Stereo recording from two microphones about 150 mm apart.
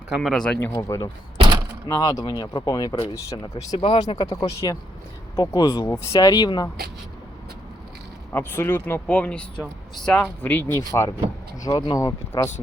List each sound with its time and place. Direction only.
0.2 s speech: 5° left (ahead or behind)
0.7 s speech: 20° left (ahead or behind)
8.3 s speech: 15° left (ahead or behind)